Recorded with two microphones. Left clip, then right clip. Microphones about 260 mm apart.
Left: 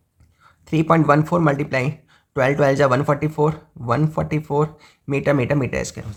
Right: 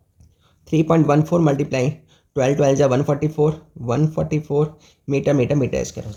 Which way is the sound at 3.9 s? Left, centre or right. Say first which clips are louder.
Left 1 dB; left.